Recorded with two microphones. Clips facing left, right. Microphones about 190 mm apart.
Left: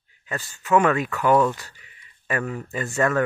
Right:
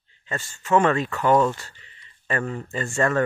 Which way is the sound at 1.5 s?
15° left (ahead or behind).